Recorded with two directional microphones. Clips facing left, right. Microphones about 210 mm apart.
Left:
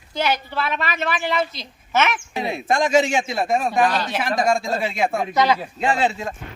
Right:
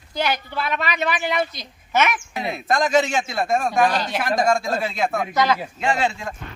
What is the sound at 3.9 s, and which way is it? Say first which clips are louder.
Speech: even; 10° right (ahead or behind).